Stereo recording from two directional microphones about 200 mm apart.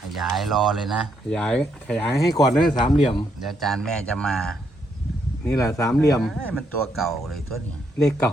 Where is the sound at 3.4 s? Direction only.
Centre (ahead or behind).